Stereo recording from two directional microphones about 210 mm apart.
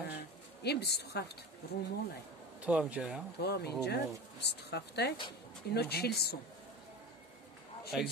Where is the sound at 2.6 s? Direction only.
5° right (ahead or behind).